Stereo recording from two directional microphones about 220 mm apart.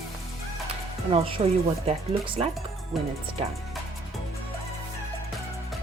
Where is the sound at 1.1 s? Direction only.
25° right (ahead or behind).